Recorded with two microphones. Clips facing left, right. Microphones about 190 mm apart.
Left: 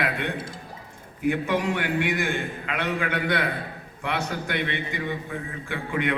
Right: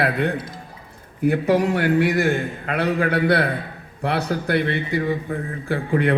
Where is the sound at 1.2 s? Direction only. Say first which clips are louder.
Right 6 dB; 40° right (ahead or behind).